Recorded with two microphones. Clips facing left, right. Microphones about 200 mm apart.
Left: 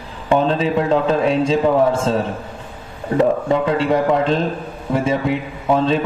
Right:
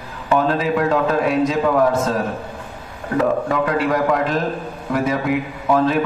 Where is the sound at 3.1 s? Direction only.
25° left (ahead or behind).